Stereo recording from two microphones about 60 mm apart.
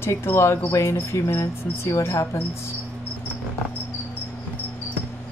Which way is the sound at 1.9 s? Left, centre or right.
Left.